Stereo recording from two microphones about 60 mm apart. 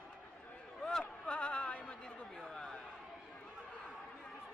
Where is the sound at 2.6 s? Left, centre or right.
Centre.